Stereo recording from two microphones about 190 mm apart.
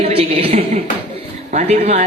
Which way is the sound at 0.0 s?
30° right (ahead or behind).